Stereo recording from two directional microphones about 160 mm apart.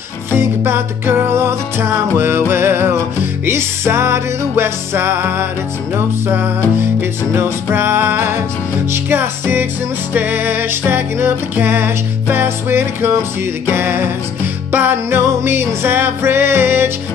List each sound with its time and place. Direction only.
0.3 s music: 15° right (ahead or behind)
7.0 s music: 15° right (ahead or behind)